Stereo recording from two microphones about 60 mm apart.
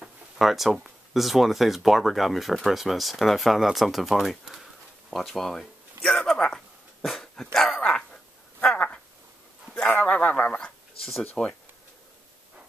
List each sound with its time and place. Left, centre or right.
0.4 s speech: centre
6.1 s a sound: centre
7.5 s speech: centre
8.7 s a sound: left
10.0 s speech: left
11.0 s speech: centre